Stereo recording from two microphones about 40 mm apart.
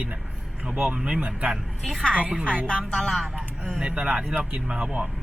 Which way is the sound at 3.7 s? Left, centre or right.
Right.